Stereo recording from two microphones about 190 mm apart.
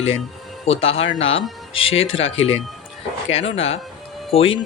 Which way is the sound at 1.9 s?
30° left (ahead or behind).